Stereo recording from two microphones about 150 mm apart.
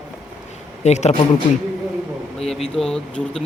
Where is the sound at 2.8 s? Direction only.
5° left (ahead or behind).